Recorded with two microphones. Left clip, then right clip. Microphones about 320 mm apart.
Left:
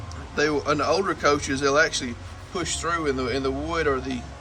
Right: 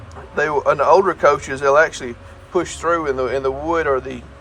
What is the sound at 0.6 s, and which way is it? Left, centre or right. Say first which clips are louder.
Speech: right 9 dB; centre.